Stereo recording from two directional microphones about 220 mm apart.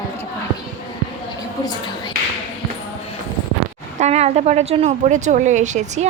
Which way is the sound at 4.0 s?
30° right (ahead or behind).